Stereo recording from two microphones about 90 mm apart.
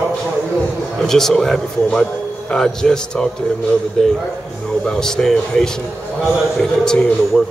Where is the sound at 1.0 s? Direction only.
5° left (ahead or behind).